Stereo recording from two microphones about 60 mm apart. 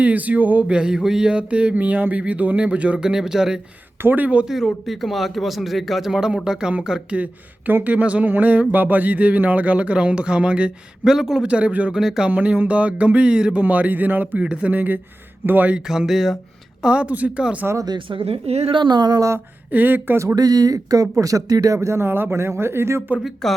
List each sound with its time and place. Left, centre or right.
0.0 s speech: right
0.7 s speech: centre
4.0 s speech: right
4.4 s a man's voice: centre
7.7 s a man's voice: right
11.9 s a man's voice: centre
12.3 s speech: right
15.9 s speech: centre
16.8 s speech: right
19.7 s speech: right
20.3 s speech: right
21.8 s speech: right
23.2 s speech: centre